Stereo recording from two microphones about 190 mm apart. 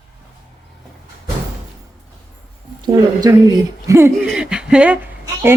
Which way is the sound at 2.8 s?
20° right (ahead or behind).